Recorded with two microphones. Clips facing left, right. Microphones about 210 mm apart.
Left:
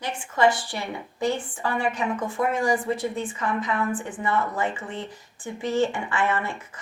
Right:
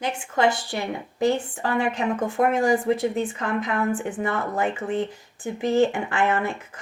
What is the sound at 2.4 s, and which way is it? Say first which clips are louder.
A woman's voice: right 4 dB; 50° right (ahead or behind).